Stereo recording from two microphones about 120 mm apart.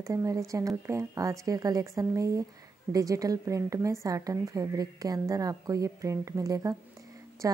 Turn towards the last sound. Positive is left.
turn(degrees=-25)  # may be behind; listen again after turning